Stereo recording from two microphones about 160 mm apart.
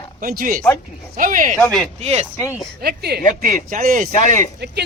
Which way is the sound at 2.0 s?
40° right (ahead or behind).